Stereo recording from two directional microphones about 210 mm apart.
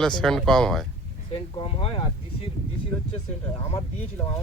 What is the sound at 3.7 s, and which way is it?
Speech, 15° left (ahead or behind).